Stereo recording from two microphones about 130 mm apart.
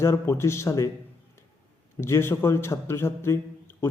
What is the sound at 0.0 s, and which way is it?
Speech, 20° left (ahead or behind).